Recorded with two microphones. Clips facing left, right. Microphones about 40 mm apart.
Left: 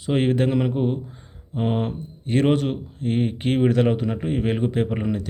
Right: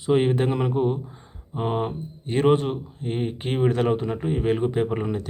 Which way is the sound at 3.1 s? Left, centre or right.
Left.